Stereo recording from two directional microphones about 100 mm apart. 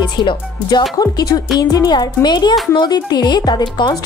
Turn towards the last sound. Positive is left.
turn(degrees=45)  # may be behind; listen again after turning